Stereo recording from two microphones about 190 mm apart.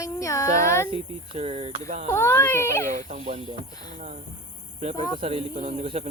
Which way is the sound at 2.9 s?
35° right (ahead or behind).